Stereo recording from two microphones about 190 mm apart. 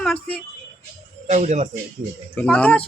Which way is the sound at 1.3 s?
40° right (ahead or behind).